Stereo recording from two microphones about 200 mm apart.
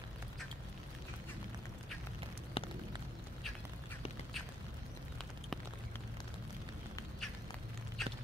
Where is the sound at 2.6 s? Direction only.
25° left (ahead or behind).